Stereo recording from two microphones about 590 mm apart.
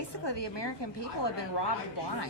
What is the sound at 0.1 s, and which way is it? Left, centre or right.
A woman's voice, left.